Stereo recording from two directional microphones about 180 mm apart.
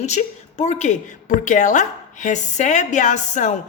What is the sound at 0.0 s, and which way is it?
A woman's voice, 40° left (ahead or behind).